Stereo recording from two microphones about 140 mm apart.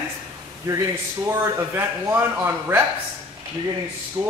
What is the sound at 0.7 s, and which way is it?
Speech, 20° right (ahead or behind).